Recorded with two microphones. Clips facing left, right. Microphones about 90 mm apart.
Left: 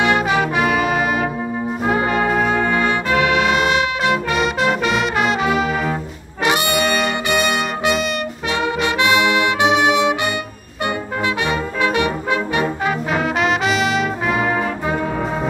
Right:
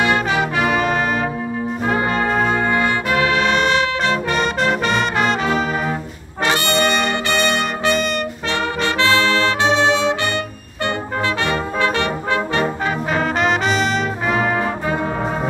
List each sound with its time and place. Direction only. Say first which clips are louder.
0.7 s brass instrument: even; 5° left (ahead or behind)
2.4 s brass instrument: even; 25° right (ahead or behind)
3.5 s music: even; 10° left (ahead or behind)
6.4 s brass instrument: even; 15° left (ahead or behind)
13.1 s brass instrument: right 1 dB; centre (ahead or behind)